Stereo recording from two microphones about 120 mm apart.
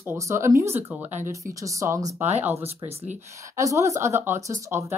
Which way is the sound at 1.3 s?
25° right (ahead or behind).